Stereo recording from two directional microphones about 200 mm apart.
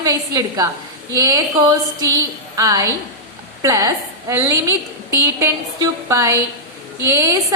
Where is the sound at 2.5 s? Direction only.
15° right (ahead or behind).